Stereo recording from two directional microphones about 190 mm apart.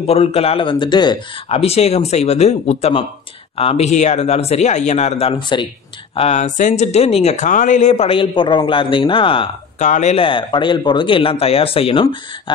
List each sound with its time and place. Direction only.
0.0 s speech: 30° left (ahead or behind)
9.8 s speech: 40° left (ahead or behind)